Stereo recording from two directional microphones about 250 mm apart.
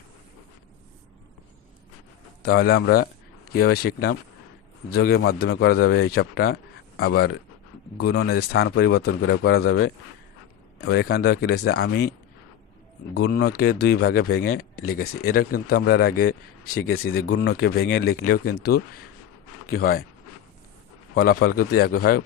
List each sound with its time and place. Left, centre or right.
2.4 s speech: left
10.8 s speech: left
13.1 s speech: left
16.6 s speech: left
17.3 s speech: left
21.2 s speech: left